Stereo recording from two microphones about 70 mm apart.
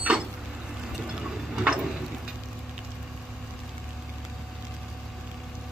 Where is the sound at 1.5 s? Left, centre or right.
Centre.